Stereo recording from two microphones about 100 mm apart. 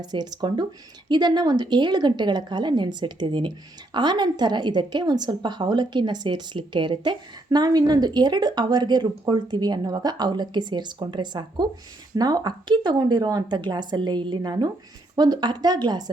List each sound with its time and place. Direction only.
0.0 s a woman's voice: 45° right (ahead or behind)